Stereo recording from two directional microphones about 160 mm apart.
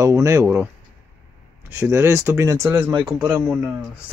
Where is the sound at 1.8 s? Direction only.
15° right (ahead or behind).